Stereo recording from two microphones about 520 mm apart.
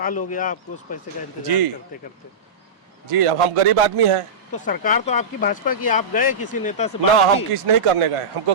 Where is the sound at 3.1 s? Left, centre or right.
Right.